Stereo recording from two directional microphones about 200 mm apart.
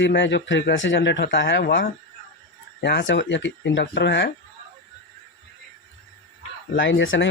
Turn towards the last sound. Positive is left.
turn(degrees=70)  # may be behind; listen again after turning